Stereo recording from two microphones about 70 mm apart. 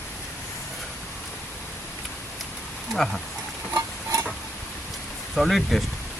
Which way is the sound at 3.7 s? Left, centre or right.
Right.